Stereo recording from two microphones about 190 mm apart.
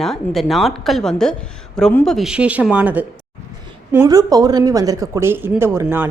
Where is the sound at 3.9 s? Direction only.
20° right (ahead or behind).